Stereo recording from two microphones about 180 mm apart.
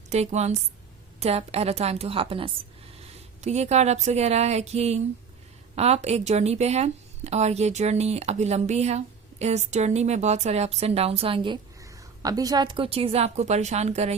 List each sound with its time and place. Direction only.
0.1 s speech: 40° right (ahead or behind)